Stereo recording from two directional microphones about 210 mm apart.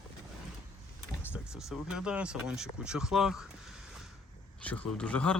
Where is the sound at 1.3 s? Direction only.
5° right (ahead or behind).